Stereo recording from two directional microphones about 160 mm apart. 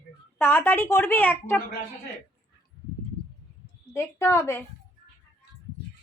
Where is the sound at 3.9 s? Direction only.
15° left (ahead or behind).